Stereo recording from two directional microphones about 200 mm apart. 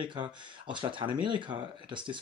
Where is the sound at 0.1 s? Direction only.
25° right (ahead or behind).